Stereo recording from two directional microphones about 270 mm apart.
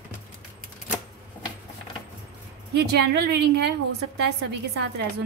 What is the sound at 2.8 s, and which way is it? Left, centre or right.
Speech, right.